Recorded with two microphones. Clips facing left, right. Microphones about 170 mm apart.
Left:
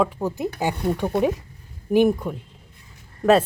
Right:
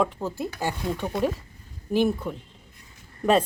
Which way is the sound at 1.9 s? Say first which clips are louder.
Left 5 dB; 15° left (ahead or behind).